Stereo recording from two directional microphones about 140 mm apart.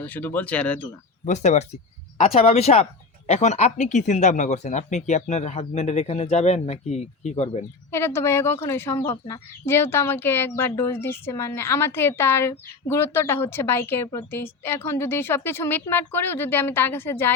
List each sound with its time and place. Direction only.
0.0 s speech: 15° left (ahead or behind)
1.2 s speech: 55° left (ahead or behind)
7.9 s speech: 20° left (ahead or behind)